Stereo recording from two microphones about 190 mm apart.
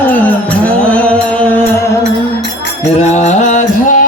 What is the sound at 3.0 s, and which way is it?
Music, 35° left (ahead or behind).